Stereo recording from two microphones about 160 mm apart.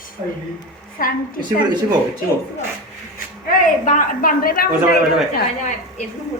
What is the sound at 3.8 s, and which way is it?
Speech, 60° left (ahead or behind).